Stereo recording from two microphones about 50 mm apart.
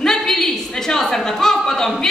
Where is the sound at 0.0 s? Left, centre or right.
Centre.